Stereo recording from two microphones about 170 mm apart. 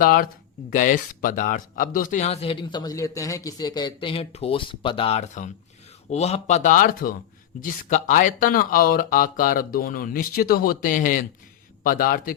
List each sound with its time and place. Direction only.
0.0 s speech: 60° left (ahead or behind)